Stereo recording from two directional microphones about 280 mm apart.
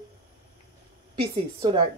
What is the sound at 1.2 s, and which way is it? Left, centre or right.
Speech, centre.